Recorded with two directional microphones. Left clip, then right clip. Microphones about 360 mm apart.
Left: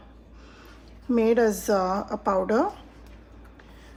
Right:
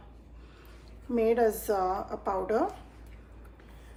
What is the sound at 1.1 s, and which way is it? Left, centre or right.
Speech, left.